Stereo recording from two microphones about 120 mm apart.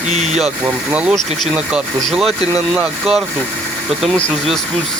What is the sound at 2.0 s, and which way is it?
Speech, centre (ahead or behind).